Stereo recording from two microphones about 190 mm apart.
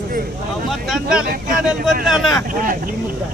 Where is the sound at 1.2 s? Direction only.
50° right (ahead or behind).